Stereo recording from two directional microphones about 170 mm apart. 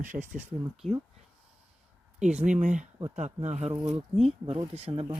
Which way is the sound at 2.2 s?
5° right (ahead or behind).